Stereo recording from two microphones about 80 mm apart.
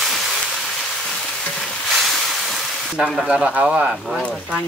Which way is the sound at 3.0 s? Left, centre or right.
Centre.